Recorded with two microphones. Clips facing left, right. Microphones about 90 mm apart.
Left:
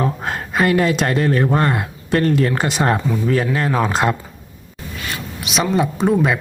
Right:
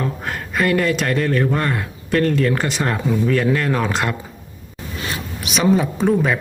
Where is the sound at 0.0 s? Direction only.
25° left (ahead or behind).